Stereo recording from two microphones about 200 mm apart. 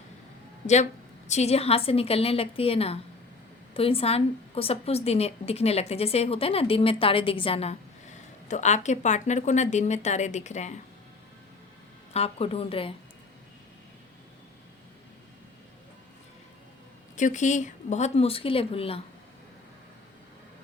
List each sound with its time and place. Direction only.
1.3 s a woman's voice: 35° left (ahead or behind)
12.1 s a woman's voice: 30° left (ahead or behind)
17.2 s a woman's voice: 40° left (ahead or behind)